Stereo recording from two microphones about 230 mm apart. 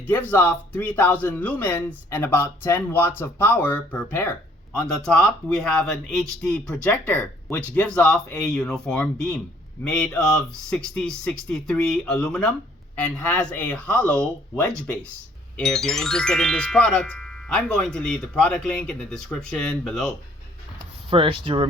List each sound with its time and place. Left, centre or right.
0.1 s speech: centre
21.1 s speech: right